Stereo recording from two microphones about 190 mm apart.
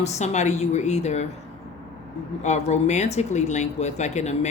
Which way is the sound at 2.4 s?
35° left (ahead or behind).